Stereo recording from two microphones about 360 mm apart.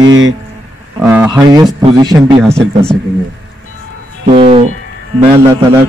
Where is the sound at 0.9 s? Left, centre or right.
Centre.